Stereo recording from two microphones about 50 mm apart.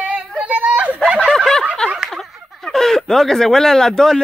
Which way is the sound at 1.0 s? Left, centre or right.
Centre.